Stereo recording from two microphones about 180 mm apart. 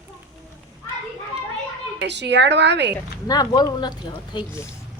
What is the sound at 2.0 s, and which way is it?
Speech, 75° right (ahead or behind).